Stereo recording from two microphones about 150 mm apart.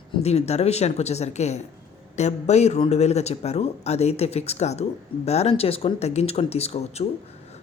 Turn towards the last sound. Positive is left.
turn(degrees=45)  # may be behind; listen again after turning